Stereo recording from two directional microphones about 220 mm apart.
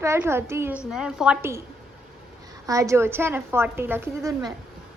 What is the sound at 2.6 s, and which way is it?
A woman's voice, 15° right (ahead or behind).